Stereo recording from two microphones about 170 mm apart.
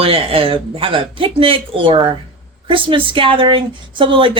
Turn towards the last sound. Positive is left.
turn(degrees=-30)  # may be behind; listen again after turning